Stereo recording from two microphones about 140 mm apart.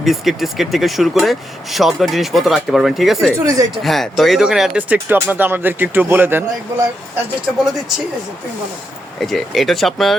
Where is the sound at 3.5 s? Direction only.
25° right (ahead or behind).